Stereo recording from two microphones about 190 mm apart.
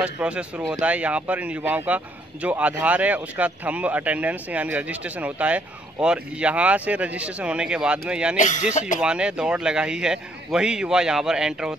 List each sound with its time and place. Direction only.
0.0 s a man's voice: 5° right (ahead or behind)
8.4 s speech: 40° left (ahead or behind)
9.0 s a man's voice: 5° right (ahead or behind)